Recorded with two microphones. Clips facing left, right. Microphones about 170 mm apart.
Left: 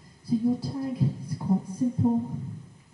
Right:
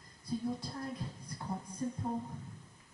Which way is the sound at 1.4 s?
25° left (ahead or behind).